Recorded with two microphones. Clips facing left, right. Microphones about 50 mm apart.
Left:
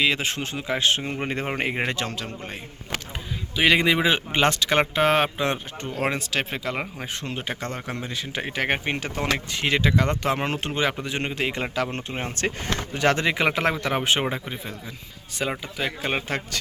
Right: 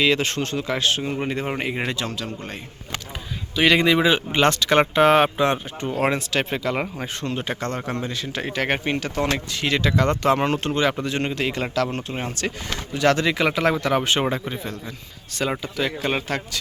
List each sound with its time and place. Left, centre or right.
0.0 s speech: centre
0.9 s a man's voice: left
3.5 s speech: centre
9.9 s speech: centre
12.4 s speech: left
14.3 s speech: centre